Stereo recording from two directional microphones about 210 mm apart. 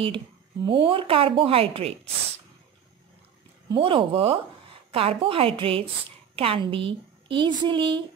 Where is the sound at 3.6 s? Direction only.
25° right (ahead or behind).